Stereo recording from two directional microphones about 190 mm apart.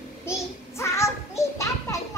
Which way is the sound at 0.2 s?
15° left (ahead or behind).